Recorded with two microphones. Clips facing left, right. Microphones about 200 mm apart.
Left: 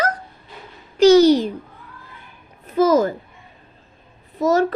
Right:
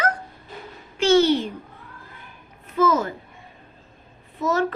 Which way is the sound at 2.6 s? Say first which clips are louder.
Left 5 dB; 35° left (ahead or behind).